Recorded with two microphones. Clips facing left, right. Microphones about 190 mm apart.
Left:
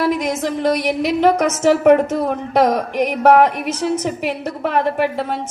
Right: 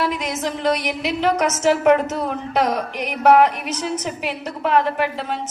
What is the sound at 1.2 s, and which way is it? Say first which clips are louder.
A woman's voice: left 3 dB; 55° left (ahead or behind).